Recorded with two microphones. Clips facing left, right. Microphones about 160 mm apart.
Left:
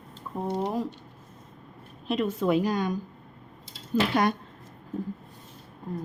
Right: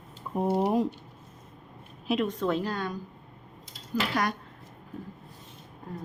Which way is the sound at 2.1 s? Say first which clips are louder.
Left 2 dB; 5° left (ahead or behind).